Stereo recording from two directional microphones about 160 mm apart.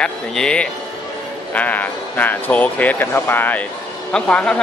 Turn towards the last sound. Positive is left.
turn(degrees=5)  # may be behind; listen again after turning